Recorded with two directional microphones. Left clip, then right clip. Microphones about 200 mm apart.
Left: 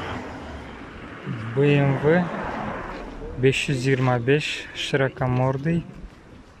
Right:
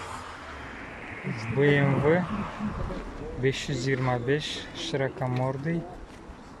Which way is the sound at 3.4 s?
10° left (ahead or behind).